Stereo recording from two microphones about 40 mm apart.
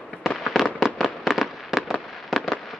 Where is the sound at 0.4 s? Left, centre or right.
Centre.